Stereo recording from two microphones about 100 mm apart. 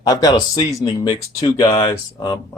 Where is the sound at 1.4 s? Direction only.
40° left (ahead or behind).